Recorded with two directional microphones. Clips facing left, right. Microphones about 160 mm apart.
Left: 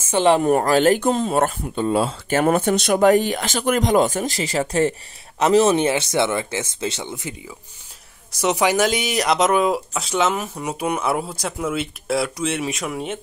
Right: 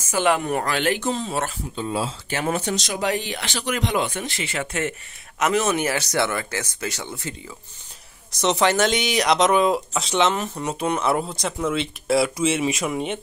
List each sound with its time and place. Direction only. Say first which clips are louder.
0.1 s speech: left 5 dB; 30° left (ahead or behind); by 13.2 s centre (ahead or behind)